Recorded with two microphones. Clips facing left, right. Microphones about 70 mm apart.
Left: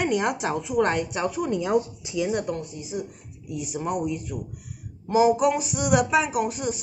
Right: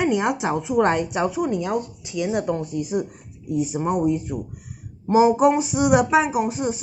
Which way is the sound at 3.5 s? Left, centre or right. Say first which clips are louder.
Right 6 dB; right.